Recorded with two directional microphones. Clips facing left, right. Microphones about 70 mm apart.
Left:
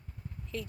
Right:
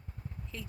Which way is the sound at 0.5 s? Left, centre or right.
Centre.